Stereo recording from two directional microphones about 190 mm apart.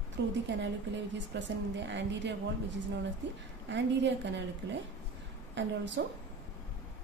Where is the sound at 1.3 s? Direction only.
65° right (ahead or behind).